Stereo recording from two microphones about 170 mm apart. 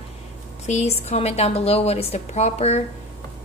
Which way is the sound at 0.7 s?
40° left (ahead or behind).